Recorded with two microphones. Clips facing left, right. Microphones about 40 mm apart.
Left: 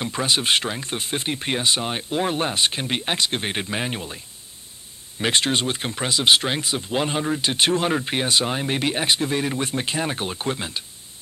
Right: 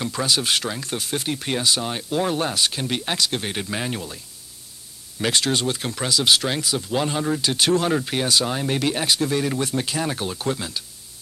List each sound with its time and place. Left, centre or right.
0.0 s speech: left
5.2 s speech: left